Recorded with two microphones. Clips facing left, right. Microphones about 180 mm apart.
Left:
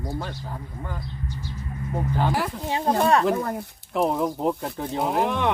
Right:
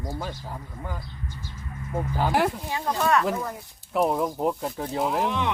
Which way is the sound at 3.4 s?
60° left (ahead or behind).